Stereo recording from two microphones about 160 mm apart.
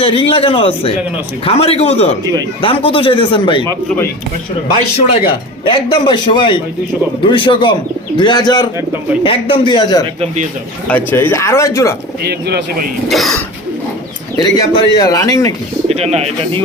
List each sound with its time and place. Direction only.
0.0 s speech: 35° left (ahead or behind)
5.2 s speech: 30° left (ahead or behind)
10.8 s speech: 10° left (ahead or behind)
12.2 s speech: 85° right
13.1 s speech: centre (ahead or behind)
14.3 s speech: 25° left (ahead or behind)
15.9 s speech: 40° right (ahead or behind)